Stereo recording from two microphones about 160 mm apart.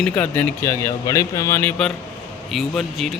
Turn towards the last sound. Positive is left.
turn(degrees=0)  # may be behind; listen again after turning